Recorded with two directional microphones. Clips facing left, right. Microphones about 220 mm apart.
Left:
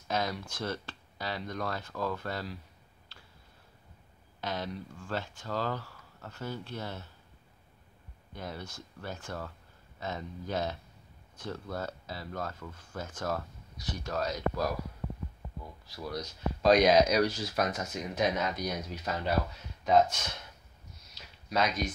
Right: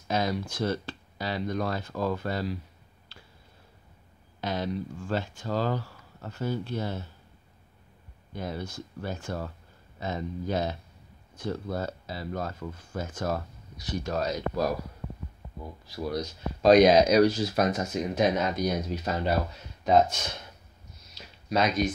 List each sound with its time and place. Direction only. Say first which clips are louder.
0.1 s speech: right 5 dB; 10° right (ahead or behind)
4.4 s speech: right 6 dB; 15° right (ahead or behind)
8.4 s speech: right 6 dB; 15° right (ahead or behind)
16.6 s speech: right 5 dB; 25° right (ahead or behind)
21.5 s speech: right 4 dB; 25° right (ahead or behind)